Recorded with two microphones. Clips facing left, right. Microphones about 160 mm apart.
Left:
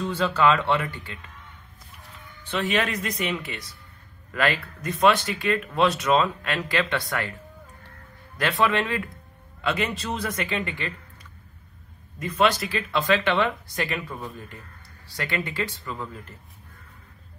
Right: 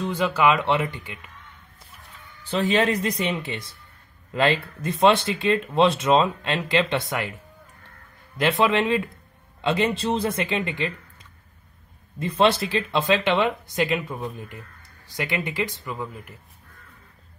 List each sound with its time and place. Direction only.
0.1 s speech: 10° right (ahead or behind)
2.5 s speech: 30° right (ahead or behind)
8.4 s speech: 20° right (ahead or behind)
12.2 s speech: 30° right (ahead or behind); by 16.3 s 10° right (ahead or behind)